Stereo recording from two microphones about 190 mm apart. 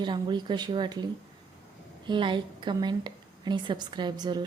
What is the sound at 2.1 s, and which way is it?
A woman's voice, 25° right (ahead or behind).